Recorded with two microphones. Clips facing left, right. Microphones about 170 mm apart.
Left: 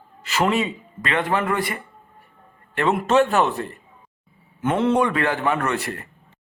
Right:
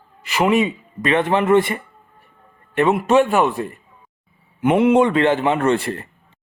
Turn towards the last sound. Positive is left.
turn(degrees=-25)  # may be behind; listen again after turning